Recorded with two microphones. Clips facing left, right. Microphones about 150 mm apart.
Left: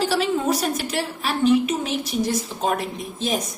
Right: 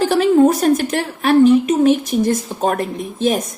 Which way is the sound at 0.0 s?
50° right (ahead or behind).